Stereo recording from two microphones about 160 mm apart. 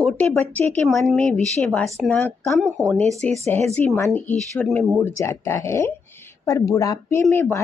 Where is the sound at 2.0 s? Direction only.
15° left (ahead or behind).